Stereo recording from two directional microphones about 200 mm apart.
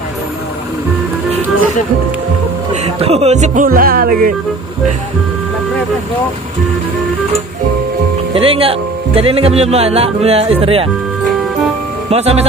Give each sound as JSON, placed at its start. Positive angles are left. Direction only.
{"t": 2.7, "sound": "speech", "side_deg": -35}
{"t": 8.4, "sound": "speech", "side_deg": -30}
{"t": 12.1, "sound": "speech", "side_deg": -30}